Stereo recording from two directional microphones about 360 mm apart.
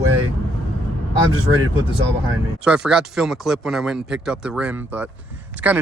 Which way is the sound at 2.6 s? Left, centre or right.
Centre.